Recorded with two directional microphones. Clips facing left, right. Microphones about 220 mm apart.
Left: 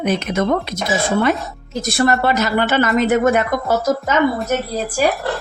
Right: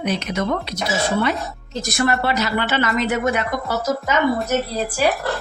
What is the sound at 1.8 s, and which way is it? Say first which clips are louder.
Speech: left 4 dB; 30° left (ahead or behind).